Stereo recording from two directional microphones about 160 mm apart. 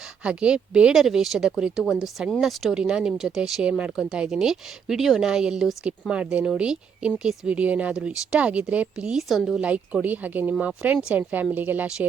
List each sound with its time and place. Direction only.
0.2 s speech: 5° right (ahead or behind)